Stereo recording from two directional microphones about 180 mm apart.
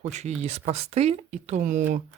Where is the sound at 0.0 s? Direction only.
40° right (ahead or behind).